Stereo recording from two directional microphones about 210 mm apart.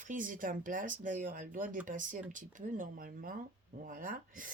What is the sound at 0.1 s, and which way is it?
Speech, 40° right (ahead or behind).